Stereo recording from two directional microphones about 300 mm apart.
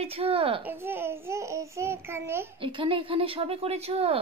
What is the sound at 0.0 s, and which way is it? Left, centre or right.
Speech, centre.